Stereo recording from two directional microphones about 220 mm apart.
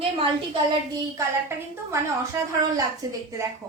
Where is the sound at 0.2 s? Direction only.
20° right (ahead or behind).